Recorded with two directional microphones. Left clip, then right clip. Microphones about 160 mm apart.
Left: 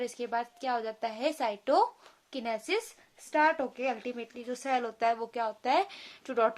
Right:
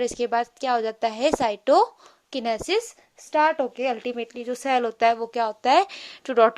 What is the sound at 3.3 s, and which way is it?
A woman's voice, 40° right (ahead or behind).